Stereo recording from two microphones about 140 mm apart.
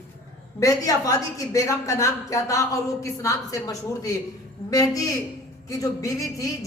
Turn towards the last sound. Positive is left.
turn(degrees=25)  # may be behind; listen again after turning